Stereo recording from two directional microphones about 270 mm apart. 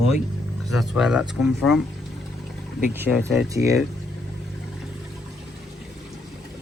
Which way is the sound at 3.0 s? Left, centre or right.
Centre.